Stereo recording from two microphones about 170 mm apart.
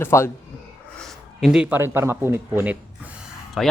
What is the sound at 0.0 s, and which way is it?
Speech, 15° left (ahead or behind).